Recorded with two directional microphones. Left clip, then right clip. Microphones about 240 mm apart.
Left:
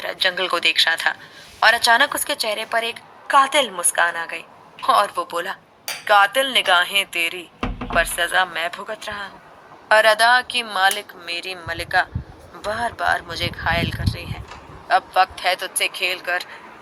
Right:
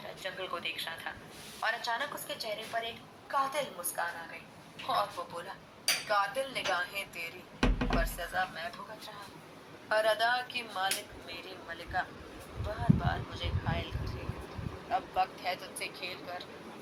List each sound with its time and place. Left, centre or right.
0.0 s a woman's voice: left